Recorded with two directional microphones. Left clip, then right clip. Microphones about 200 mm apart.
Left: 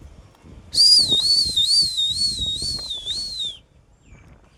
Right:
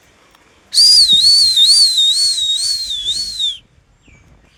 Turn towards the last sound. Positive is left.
turn(degrees=5)  # may be behind; listen again after turning